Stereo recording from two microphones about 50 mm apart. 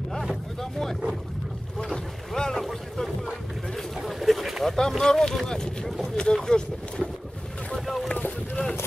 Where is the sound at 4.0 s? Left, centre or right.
Centre.